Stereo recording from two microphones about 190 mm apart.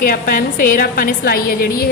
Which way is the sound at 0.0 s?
50° left (ahead or behind).